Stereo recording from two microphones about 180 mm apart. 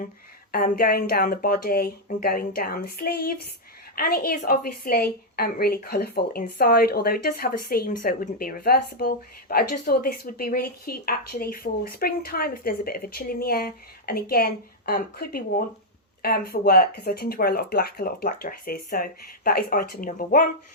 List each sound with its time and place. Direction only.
0.5 s speech: 55° left (ahead or behind)